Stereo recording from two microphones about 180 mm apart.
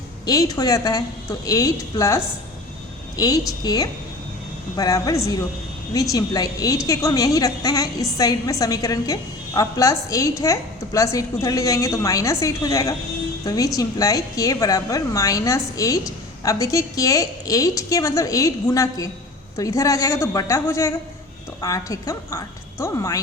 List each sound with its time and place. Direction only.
0.3 s a woman's voice: 20° left (ahead or behind)